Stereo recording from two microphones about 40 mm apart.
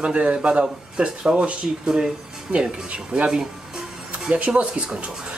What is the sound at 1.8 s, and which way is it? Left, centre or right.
Speech, centre.